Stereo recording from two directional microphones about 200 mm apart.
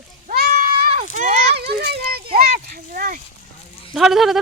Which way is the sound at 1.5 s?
55° right (ahead or behind).